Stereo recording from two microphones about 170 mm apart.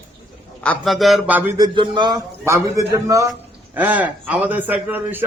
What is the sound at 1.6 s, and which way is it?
A man's voice, 30° right (ahead or behind).